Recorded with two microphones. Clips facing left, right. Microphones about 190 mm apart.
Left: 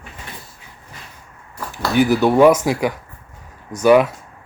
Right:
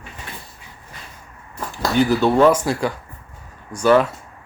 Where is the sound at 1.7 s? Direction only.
10° left (ahead or behind).